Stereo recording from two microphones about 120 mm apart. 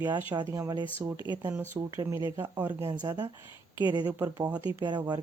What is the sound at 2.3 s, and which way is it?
Speech, 15° right (ahead or behind).